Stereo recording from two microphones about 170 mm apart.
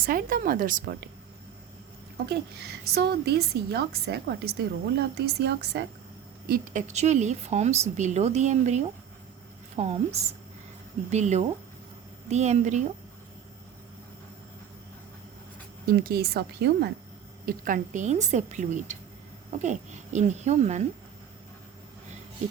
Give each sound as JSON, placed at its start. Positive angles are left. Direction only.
{"t": 0.0, "sound": "speech", "side_deg": -55}
{"t": 2.3, "sound": "a woman's voice", "side_deg": -70}
{"t": 6.5, "sound": "a woman's voice", "side_deg": -50}
{"t": 15.9, "sound": "a woman's voice", "side_deg": -60}
{"t": 17.4, "sound": "a woman's voice", "side_deg": -50}